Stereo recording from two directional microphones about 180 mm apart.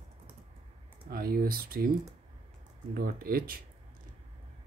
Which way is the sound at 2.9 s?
55° right (ahead or behind).